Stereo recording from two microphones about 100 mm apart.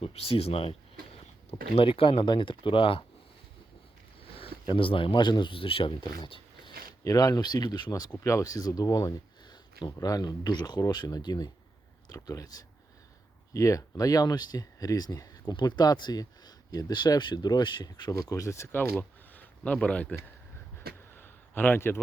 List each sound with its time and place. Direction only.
0.0 s speech: 80° left; by 3.0 s 60° left (ahead or behind)
4.2 s a sound: 70° left (ahead or behind)
4.6 s speech: 55° left (ahead or behind)
6.2 s a sound: 55° left (ahead or behind)
7.0 s speech: 35° left (ahead or behind); by 20.1 s 15° left (ahead or behind)
20.7 s vehicle: 20° left (ahead or behind)